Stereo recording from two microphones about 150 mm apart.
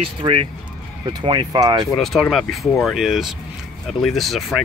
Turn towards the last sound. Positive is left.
turn(degrees=0)  # may be behind; listen again after turning